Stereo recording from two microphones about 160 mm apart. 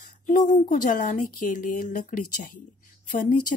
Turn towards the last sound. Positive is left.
turn(degrees=55)  # may be behind; listen again after turning